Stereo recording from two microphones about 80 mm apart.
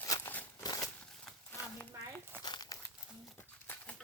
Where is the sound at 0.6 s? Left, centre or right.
Left.